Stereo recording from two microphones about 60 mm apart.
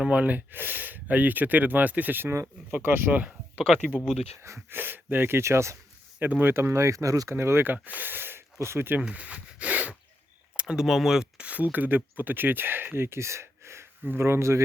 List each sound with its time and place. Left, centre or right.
0.0 s speech: right
2.3 s speech: right
3.1 s speech: right
4.7 s speech: right
5.4 s speech: right
6.1 s speech: right
7.3 s speech: right
7.7 s speech: right
8.5 s speech: right
9.0 s speech: right
10.6 s a sound: centre
10.8 s speech: centre; by 13.8 s right
14.0 s speech: right